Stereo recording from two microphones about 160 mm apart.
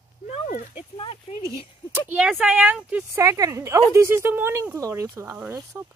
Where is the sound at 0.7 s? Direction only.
35° left (ahead or behind).